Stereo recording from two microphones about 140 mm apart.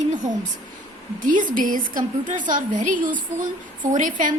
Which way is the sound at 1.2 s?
70° right (ahead or behind).